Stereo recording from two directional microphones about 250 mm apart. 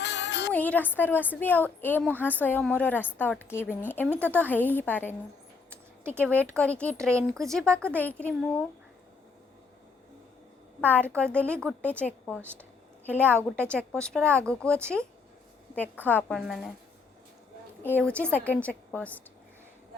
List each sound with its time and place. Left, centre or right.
0.0 s music: left
0.5 s a woman's voice: centre
6.2 s speech: centre
10.8 s a woman's voice: centre
13.1 s a woman's voice: centre
13.6 s a woman's voice: centre
17.8 s speech: centre